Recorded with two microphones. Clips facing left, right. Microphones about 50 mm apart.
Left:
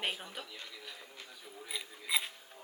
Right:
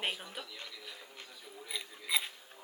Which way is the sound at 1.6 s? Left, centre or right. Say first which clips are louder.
Even; centre.